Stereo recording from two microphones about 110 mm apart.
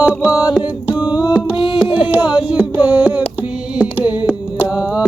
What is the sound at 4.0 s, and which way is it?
Carnatic music, 15° right (ahead or behind).